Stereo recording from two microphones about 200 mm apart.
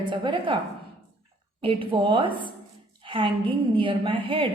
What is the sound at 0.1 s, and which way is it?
Speech, 25° right (ahead or behind).